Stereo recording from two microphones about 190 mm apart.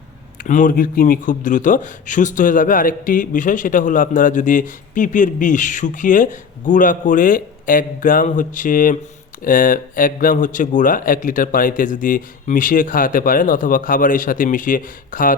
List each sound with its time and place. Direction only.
0.4 s speech: 45° left (ahead or behind)